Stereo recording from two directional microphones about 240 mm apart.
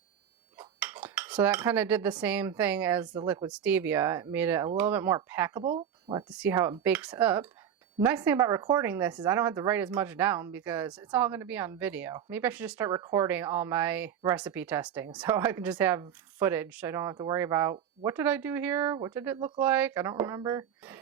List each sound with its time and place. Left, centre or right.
0.8 s cutlery: centre
3.2 s speech: centre
5.6 s speech: right
6.3 s speech: centre